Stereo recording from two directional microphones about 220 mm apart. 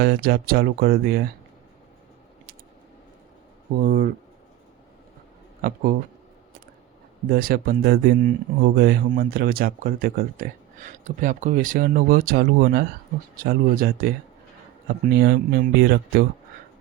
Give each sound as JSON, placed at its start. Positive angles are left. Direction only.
{"t": 0.0, "sound": "speech", "side_deg": -45}
{"t": 3.8, "sound": "speech", "side_deg": -40}
{"t": 7.3, "sound": "speech", "side_deg": -40}